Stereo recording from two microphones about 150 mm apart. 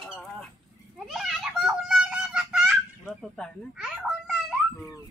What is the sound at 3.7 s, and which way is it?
A child's voice, 5° right (ahead or behind).